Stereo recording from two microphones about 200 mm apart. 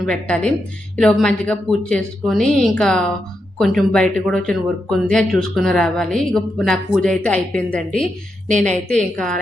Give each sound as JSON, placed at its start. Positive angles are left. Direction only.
{"t": 0.0, "sound": "speech", "side_deg": 5}
{"t": 8.4, "sound": "speech", "side_deg": -35}
{"t": 8.9, "sound": "speech", "side_deg": 5}